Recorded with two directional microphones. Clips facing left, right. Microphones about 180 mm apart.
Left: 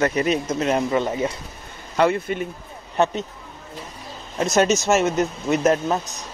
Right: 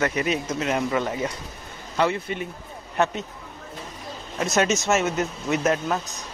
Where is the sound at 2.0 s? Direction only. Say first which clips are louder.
Left 4 dB; 50° left (ahead or behind).